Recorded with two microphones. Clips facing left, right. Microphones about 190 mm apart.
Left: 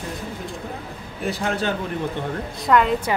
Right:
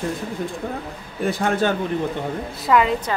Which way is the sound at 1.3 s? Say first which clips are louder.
Right 3 dB; 55° right (ahead or behind).